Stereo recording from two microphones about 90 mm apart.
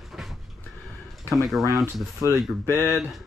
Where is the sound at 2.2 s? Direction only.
35° right (ahead or behind).